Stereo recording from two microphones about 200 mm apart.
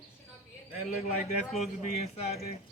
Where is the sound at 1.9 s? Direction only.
30° left (ahead or behind).